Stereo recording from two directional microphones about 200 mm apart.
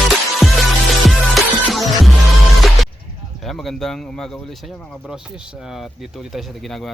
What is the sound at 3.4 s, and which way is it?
Speech, centre (ahead or behind).